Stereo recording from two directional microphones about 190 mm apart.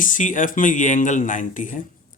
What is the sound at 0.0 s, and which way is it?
Speech, 45° left (ahead or behind).